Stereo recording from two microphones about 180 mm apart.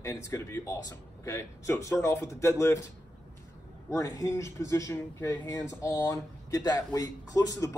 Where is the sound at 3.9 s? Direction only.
20° left (ahead or behind).